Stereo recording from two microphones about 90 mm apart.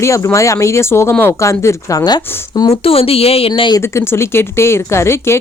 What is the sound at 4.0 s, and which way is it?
A woman's voice, 30° left (ahead or behind).